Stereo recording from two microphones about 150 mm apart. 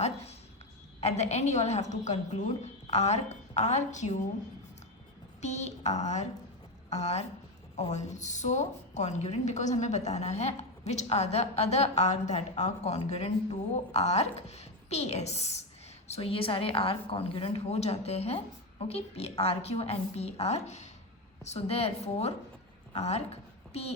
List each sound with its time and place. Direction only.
1.0 s a woman's voice: 50° left (ahead or behind)
5.4 s a woman's voice: 50° left (ahead or behind)